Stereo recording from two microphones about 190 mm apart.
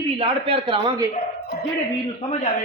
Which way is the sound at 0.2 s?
30° right (ahead or behind).